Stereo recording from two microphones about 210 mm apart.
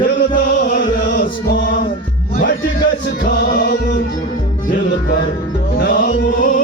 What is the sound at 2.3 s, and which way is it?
Music, 45° left (ahead or behind).